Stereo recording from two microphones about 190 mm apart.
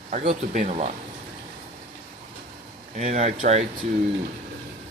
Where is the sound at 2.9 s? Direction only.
35° right (ahead or behind).